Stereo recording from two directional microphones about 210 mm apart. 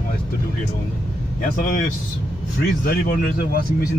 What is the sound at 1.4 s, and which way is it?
Speech, 40° left (ahead or behind).